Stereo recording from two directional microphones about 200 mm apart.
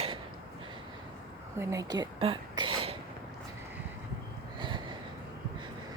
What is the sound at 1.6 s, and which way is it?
Speech, 15° right (ahead or behind).